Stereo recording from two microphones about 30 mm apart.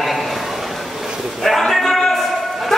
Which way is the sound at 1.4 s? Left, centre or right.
Centre.